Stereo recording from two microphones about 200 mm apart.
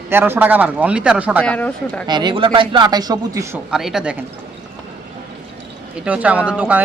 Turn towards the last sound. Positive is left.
turn(degrees=-5)  # may be behind; listen again after turning